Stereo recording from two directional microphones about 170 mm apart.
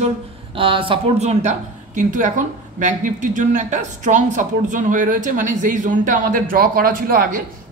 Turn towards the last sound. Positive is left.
turn(degrees=-55)  # may be behind; listen again after turning